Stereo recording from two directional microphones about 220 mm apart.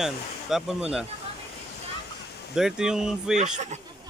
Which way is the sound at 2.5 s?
5° right (ahead or behind).